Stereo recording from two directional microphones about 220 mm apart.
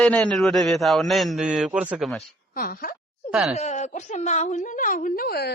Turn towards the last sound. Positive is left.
turn(degrees=45)  # may be behind; listen again after turning